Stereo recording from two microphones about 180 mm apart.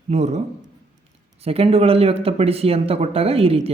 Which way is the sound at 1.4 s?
35° right (ahead or behind).